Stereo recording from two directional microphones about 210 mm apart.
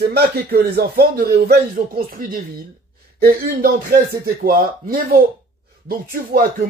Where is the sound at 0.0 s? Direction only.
50° right (ahead or behind).